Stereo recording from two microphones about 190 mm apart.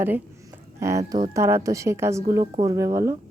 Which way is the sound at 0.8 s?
15° right (ahead or behind).